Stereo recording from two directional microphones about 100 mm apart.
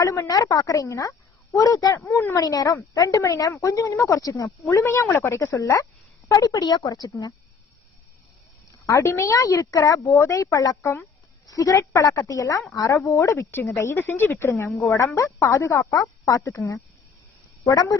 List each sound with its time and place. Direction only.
0.0 s a woman's voice: 35° left (ahead or behind)
2.0 s speech: 25° left (ahead or behind)
2.4 s a woman's voice: 40° left (ahead or behind)
8.9 s a woman's voice: 30° left (ahead or behind)
17.6 s speech: 35° left (ahead or behind)